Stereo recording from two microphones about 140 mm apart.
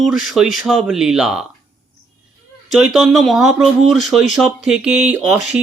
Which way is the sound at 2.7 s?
5° right (ahead or behind).